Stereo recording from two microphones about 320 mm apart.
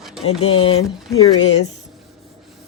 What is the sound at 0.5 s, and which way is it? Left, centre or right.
Speech, left.